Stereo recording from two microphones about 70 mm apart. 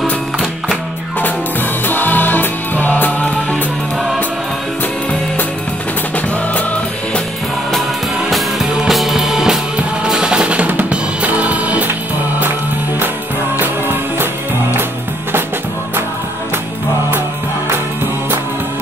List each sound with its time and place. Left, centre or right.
1.9 s music: left
8.3 s music: centre; by 11.9 s right
14.1 s music: right